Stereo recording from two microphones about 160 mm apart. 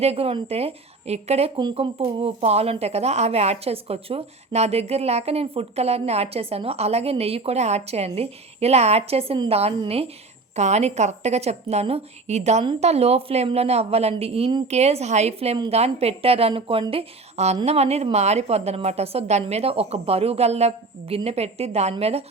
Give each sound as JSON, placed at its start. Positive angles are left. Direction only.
{"t": 0.0, "sound": "speech", "side_deg": -40}
{"t": 1.5, "sound": "a woman's voice", "side_deg": -30}